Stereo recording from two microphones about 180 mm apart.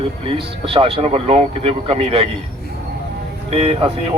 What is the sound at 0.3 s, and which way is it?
Speech, 30° right (ahead or behind).